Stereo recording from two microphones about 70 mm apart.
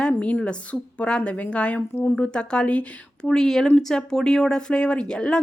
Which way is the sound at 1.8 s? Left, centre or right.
Left.